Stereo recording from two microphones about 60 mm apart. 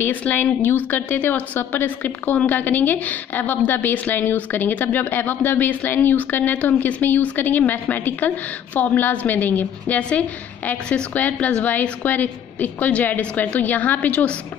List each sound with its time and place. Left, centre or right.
0.2 s a woman's voice: left